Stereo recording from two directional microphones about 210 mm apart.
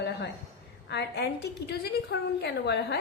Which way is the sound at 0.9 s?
55° left (ahead or behind).